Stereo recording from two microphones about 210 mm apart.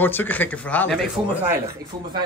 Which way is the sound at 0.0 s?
10° left (ahead or behind).